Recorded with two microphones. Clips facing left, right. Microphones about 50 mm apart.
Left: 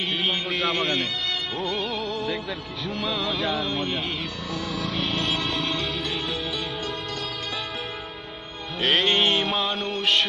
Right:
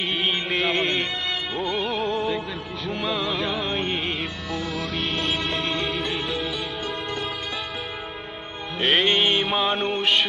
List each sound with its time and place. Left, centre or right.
0.2 s music: centre
0.8 s speech: right
1.5 s music: centre
2.0 s music: right
2.8 s music: centre
8.8 s music: centre
9.1 s mantra: centre